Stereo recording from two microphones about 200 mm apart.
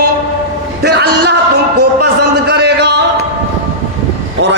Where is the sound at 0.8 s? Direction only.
55° right (ahead or behind).